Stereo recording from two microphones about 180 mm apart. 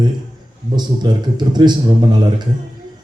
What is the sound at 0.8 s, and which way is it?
Speech, 25° right (ahead or behind).